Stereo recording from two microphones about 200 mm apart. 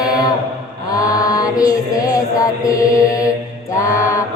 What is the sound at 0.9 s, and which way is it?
Music, 20° left (ahead or behind).